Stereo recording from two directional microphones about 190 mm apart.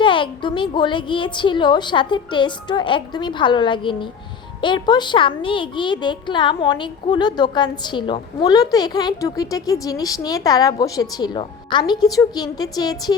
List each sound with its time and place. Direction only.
0.0 s a child's voice: 25° left (ahead or behind)